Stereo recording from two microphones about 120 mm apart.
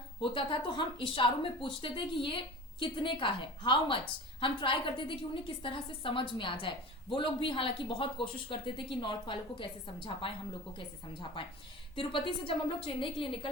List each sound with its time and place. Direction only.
0.2 s speech: 45° left (ahead or behind)